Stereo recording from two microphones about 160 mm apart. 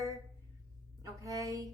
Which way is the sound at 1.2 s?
20° right (ahead or behind).